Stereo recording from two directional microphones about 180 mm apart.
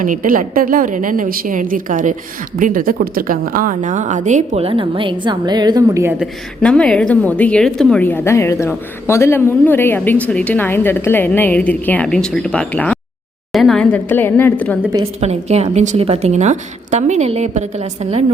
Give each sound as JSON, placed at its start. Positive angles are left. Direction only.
{"t": 0.0, "sound": "a woman's voice", "side_deg": -50}
{"t": 6.6, "sound": "a woman's voice", "side_deg": 5}
{"t": 15.2, "sound": "a woman's voice", "side_deg": -35}